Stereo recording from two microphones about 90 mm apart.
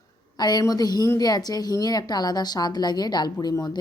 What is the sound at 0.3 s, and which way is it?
A woman's voice, 50° left (ahead or behind).